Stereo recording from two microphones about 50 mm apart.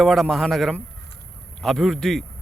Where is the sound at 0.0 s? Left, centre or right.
Centre.